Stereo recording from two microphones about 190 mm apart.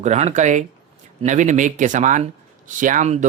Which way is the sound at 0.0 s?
35° right (ahead or behind).